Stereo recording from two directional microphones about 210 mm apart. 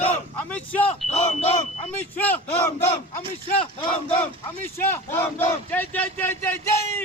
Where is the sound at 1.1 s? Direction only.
30° left (ahead or behind).